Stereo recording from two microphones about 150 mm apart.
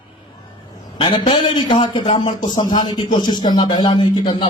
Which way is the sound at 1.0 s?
35° left (ahead or behind).